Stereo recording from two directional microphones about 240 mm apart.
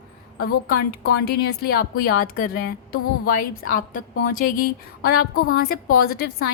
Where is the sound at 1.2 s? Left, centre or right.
Left.